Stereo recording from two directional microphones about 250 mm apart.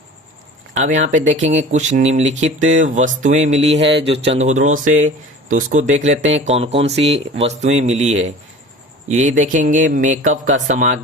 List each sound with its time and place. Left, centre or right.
0.7 s speech: right